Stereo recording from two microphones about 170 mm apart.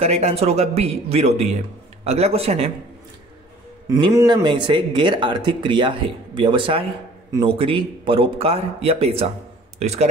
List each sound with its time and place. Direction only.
0.0 s speech: 40° right (ahead or behind)
3.9 s speech: 15° right (ahead or behind); by 10.0 s 40° right (ahead or behind)